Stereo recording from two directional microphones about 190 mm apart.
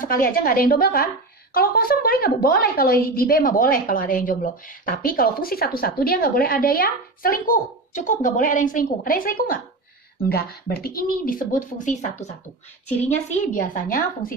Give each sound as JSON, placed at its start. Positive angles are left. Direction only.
{"t": 0.0, "sound": "a woman's voice", "side_deg": 50}
{"t": 13.3, "sound": "a woman's voice", "side_deg": 45}